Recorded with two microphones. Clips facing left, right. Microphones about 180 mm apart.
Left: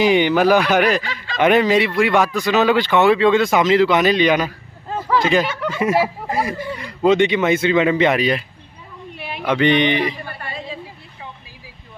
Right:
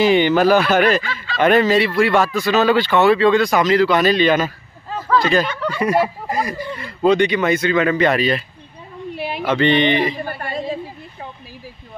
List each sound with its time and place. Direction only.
0.0 s speech: 15° left (ahead or behind)
5.8 s speech: 5° left (ahead or behind)
6.8 s a man's voice: 20° left (ahead or behind)
9.1 s a sound: 35° right (ahead or behind)
9.5 s speech: 10° left (ahead or behind)
10.2 s a sound: 45° right (ahead or behind)